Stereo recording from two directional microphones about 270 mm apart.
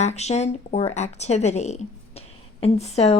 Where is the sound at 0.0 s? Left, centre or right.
Left.